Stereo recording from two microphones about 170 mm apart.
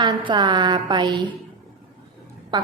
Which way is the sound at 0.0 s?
25° right (ahead or behind).